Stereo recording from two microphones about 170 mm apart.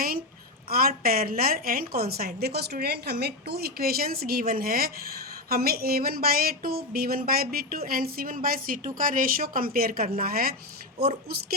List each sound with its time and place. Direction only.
0.7 s speech: 60° right (ahead or behind)